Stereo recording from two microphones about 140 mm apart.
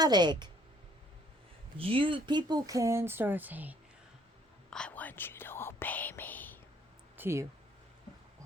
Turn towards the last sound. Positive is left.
turn(degrees=-15)  # may be behind; listen again after turning